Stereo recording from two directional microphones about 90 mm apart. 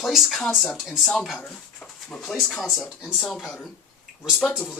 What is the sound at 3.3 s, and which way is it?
Speech, centre (ahead or behind).